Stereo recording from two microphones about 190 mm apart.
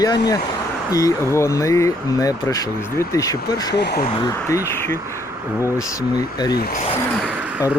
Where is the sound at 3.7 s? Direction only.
60° left (ahead or behind).